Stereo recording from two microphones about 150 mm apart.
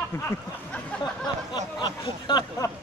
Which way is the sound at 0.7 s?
10° left (ahead or behind).